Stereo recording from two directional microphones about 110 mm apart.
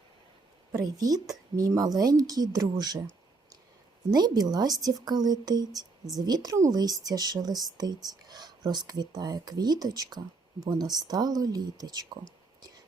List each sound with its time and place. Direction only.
0.7 s a woman's voice: 35° right (ahead or behind)
4.1 s a woman's voice: 40° right (ahead or behind)